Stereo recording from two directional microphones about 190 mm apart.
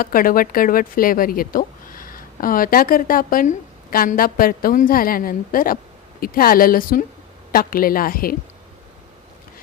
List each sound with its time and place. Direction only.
0.0 s speech: 50° left (ahead or behind)